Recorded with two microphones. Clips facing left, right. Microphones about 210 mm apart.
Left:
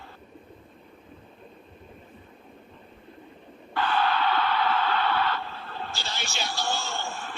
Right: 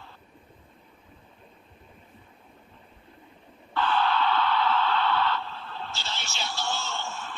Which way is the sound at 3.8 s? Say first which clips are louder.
Even; 55° left (ahead or behind).